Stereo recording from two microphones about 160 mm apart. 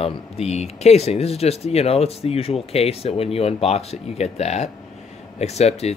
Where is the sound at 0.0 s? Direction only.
40° left (ahead or behind).